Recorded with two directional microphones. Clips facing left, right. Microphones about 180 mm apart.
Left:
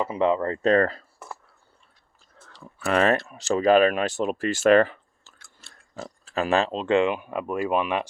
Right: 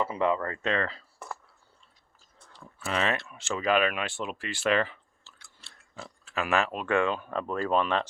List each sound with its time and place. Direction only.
0.0 s speech: 20° left (ahead or behind); by 1.0 s 45° left (ahead or behind)
2.5 s speech: 70° left (ahead or behind); by 8.0 s 10° left (ahead or behind)